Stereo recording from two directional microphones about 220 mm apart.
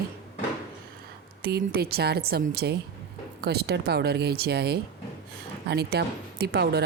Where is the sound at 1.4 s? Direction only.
45° right (ahead or behind).